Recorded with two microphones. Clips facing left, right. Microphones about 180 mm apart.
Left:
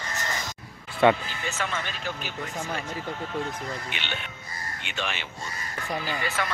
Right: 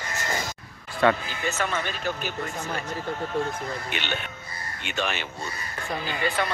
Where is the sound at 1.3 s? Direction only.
45° right (ahead or behind).